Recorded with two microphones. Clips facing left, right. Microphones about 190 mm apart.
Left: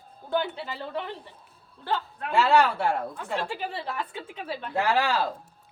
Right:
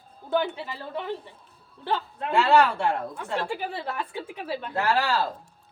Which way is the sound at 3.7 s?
5° right (ahead or behind).